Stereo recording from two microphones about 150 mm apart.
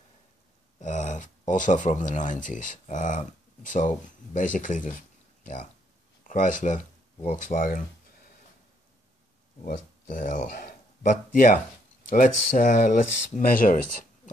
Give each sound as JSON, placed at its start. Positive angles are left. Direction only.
{"t": 0.7, "sound": "speech", "side_deg": 55}
{"t": 9.7, "sound": "speech", "side_deg": 60}